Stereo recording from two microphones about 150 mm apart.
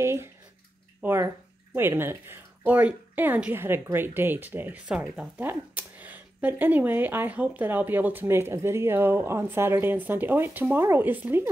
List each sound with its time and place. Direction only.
0.0 s bathtub: 15° right (ahead or behind)
1.0 s a woman's voice: 15° right (ahead or behind)